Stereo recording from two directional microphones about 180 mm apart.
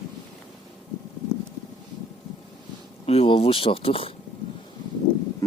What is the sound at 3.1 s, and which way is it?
Speech, 30° left (ahead or behind).